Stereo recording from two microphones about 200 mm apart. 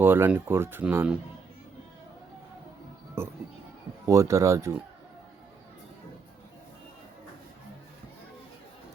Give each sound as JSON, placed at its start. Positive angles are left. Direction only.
{"t": 0.0, "sound": "speech", "side_deg": -10}
{"t": 3.2, "sound": "speech", "side_deg": -10}